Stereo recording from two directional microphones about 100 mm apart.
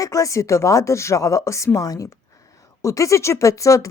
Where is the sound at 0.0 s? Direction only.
35° left (ahead or behind).